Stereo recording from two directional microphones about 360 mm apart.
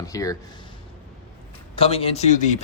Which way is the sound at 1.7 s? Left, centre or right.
Centre.